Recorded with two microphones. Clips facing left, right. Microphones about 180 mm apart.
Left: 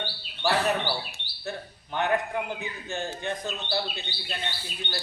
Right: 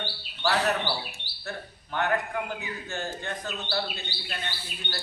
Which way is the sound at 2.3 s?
20° left (ahead or behind).